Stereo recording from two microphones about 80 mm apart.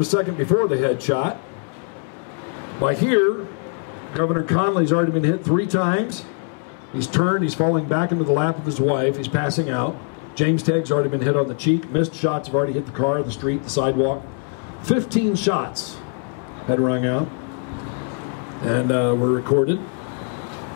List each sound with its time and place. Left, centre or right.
0.1 s speech: left
2.8 s speech: left
7.1 s speech: left
18.6 s speech: left